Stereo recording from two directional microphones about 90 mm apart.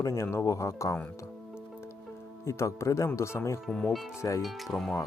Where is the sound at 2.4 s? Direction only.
30° left (ahead or behind).